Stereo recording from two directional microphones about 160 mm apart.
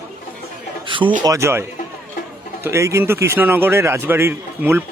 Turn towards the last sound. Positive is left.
turn(degrees=-15)  # may be behind; listen again after turning